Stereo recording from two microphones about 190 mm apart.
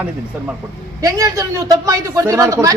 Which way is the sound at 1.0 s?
15° right (ahead or behind).